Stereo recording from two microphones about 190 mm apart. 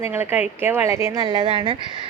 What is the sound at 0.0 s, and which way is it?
Speech, 10° right (ahead or behind).